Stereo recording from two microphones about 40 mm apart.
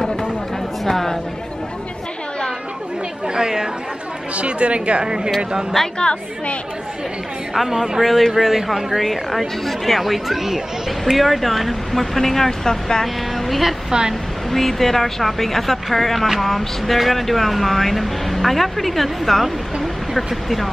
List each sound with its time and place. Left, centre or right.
0.8 s chatter: centre
3.3 s chatter: centre
4.4 s a woman's voice: right
5.9 s a woman's voice: left
7.5 s speech: centre
13.0 s a woman's voice: centre